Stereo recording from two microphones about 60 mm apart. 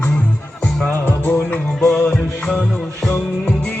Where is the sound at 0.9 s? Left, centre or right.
Left.